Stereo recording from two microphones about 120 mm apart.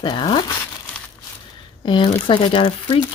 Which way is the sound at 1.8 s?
45° left (ahead or behind).